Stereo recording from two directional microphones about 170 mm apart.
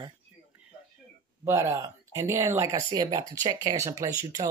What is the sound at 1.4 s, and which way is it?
Speech, 20° right (ahead or behind).